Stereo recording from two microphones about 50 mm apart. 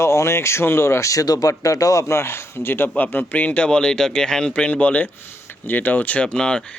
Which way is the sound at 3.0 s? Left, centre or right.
Left.